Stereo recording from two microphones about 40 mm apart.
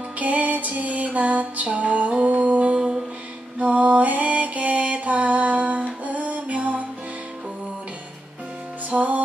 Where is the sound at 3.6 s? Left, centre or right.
Right.